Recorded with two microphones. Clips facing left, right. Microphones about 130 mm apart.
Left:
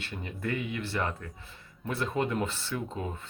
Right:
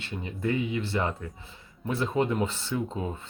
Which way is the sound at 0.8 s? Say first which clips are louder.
Right 3 dB; 20° right (ahead or behind).